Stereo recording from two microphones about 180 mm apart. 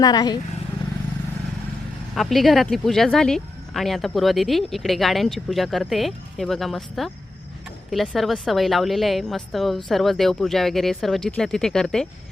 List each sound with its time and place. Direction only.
0.0 s speech: 20° left (ahead or behind)
2.1 s speech: centre (ahead or behind)